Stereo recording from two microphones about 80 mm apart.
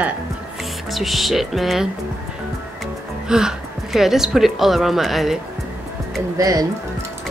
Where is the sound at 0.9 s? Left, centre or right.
Centre.